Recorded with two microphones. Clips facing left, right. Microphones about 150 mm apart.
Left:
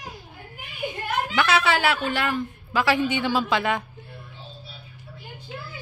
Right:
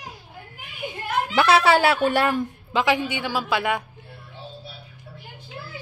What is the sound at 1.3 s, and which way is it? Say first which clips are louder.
Speech: right 5 dB; 35° right (ahead or behind).